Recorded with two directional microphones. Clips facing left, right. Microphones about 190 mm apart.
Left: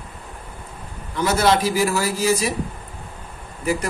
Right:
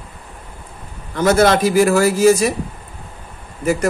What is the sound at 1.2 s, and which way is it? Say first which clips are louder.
A man's voice: right 5 dB; 50° right (ahead or behind).